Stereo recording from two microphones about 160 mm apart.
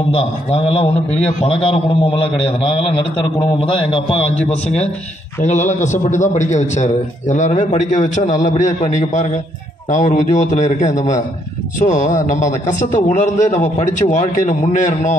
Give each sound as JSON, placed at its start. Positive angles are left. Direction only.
{"t": 0.1, "sound": "a man's voice", "side_deg": 40}